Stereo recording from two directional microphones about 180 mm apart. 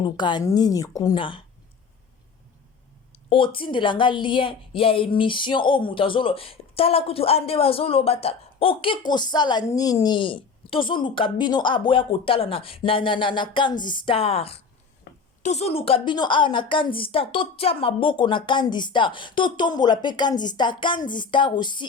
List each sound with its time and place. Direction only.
0.0 s speech: 25° left (ahead or behind)
3.1 s speech: 30° left (ahead or behind)
15.1 s a sound: 60° left (ahead or behind)
15.4 s speech: 35° left (ahead or behind)